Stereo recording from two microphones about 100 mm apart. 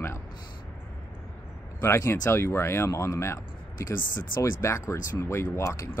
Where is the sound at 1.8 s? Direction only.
25° left (ahead or behind).